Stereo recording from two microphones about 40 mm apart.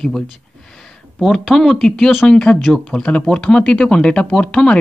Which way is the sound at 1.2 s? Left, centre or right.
Centre.